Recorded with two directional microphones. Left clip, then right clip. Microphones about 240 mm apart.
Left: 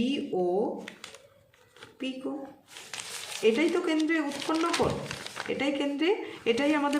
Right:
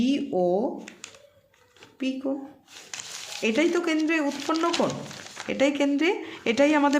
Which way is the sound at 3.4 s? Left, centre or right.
Right.